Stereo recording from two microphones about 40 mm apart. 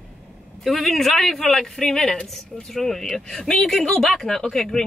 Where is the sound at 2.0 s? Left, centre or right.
Left.